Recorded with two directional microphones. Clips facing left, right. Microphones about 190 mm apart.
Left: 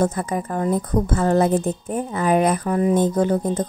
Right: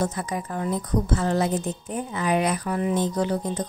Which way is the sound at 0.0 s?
50° left (ahead or behind).